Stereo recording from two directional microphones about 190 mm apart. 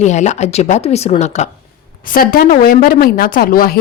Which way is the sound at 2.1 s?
50° left (ahead or behind).